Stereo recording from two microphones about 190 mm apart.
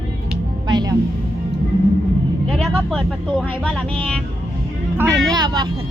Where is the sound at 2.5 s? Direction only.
5° left (ahead or behind).